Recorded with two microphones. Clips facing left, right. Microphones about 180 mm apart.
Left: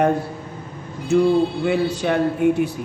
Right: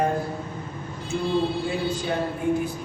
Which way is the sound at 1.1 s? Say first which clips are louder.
Left 8 dB; 70° left (ahead or behind).